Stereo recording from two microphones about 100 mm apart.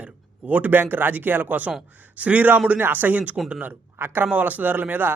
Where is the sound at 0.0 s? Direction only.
15° right (ahead or behind).